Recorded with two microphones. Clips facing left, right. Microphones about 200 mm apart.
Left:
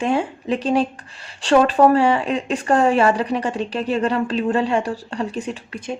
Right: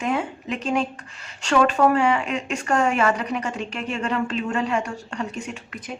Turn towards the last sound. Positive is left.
turn(degrees=30)  # may be behind; listen again after turning